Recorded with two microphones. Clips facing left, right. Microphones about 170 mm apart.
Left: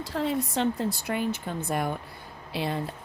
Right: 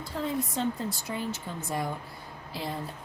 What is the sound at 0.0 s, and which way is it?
Speech, 80° left.